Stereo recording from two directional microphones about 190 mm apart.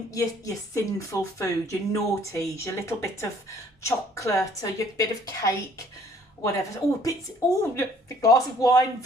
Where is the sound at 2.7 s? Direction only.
15° left (ahead or behind).